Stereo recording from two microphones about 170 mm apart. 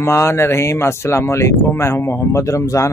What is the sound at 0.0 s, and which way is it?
Speech, 15° left (ahead or behind).